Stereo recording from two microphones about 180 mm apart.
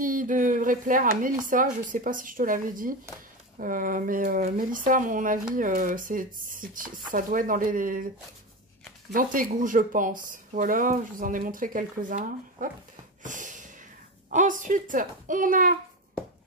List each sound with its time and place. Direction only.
0.0 s speech: 50° right (ahead or behind)
9.1 s speech: 50° right (ahead or behind)
13.2 s a sound: 45° right (ahead or behind)
14.3 s speech: 45° right (ahead or behind)